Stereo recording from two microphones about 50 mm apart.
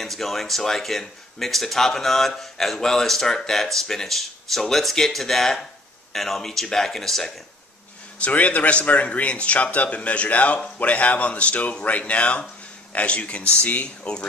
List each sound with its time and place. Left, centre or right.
0.0 s speech: centre
8.2 s a man's voice: left